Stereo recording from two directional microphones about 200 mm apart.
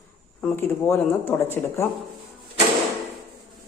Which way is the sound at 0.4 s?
10° left (ahead or behind).